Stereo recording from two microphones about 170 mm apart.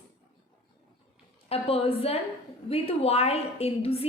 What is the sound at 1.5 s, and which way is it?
A woman's voice, 35° left (ahead or behind).